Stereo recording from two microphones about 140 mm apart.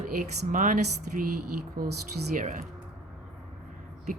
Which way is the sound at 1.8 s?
90° right.